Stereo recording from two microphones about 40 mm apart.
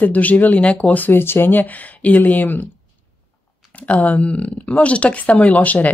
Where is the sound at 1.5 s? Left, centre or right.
Left.